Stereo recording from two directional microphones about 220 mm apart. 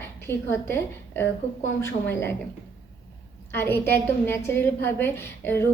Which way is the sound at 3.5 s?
10° left (ahead or behind).